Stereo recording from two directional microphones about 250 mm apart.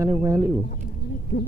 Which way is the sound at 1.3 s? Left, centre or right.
Left.